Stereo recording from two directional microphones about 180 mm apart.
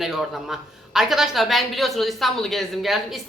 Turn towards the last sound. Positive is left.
turn(degrees=0)  # may be behind; listen again after turning